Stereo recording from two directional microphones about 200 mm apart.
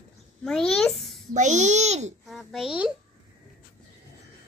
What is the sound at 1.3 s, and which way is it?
Speech, 35° right (ahead or behind).